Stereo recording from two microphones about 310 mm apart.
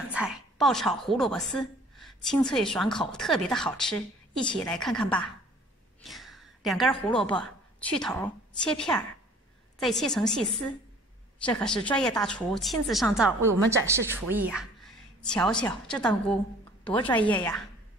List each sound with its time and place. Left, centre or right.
0.1 s a woman's voice: centre